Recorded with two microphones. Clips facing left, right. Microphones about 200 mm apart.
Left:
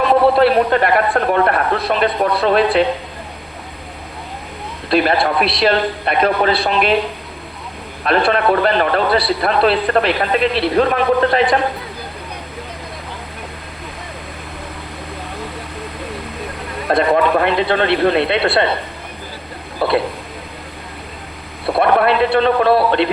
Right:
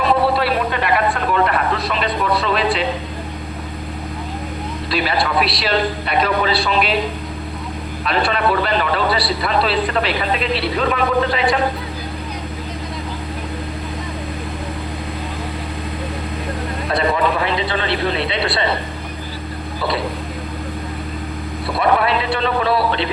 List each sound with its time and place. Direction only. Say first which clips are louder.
0.3 s a man's voice: left 7 dB; 50° left (ahead or behind)
4.9 s a man's voice: left 6 dB; 50° left (ahead or behind)
8.0 s a man's voice: left 4 dB; 55° left (ahead or behind)
16.9 s a man's voice: left 5 dB; 55° left (ahead or behind)
19.8 s speech: left 6 dB; 55° left (ahead or behind)
21.7 s a man's voice: left 4 dB; 55° left (ahead or behind)